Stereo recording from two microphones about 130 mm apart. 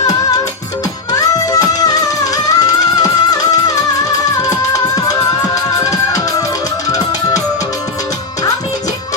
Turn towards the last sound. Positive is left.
turn(degrees=25)  # may be behind; listen again after turning